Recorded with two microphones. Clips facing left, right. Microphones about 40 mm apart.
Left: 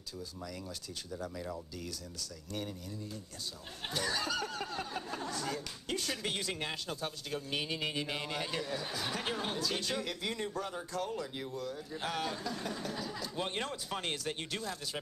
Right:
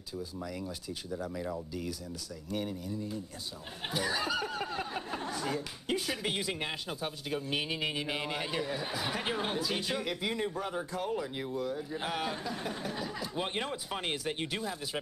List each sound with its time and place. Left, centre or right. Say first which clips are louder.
0.1 s speech: right 5 dB; centre